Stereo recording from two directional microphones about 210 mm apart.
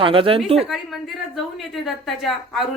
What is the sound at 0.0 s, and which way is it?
Speech, 25° right (ahead or behind).